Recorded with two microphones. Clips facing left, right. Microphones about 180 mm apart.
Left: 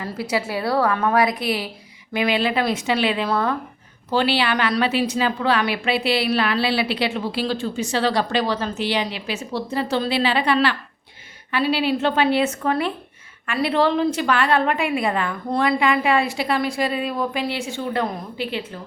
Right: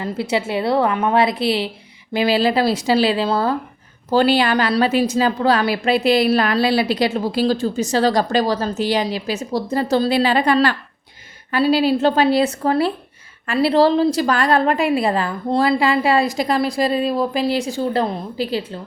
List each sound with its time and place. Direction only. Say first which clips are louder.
0.0 s a woman's voice: right 3 dB; 25° right (ahead or behind)
4.1 s a woman's voice: right 5 dB; 40° right (ahead or behind)